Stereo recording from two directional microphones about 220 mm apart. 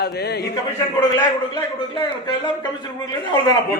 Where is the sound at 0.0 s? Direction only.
45° left (ahead or behind).